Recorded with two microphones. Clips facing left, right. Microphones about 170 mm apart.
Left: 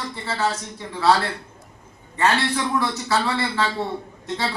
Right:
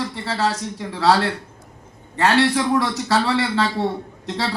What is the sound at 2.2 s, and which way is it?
A man's voice, 85° right.